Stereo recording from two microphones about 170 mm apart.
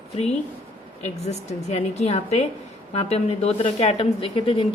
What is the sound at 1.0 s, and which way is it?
Speech, 40° left (ahead or behind).